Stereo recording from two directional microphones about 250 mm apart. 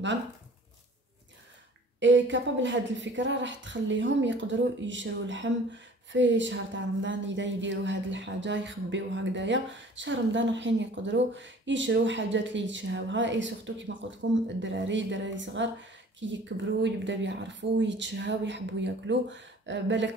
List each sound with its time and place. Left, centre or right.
2.0 s a woman's voice: right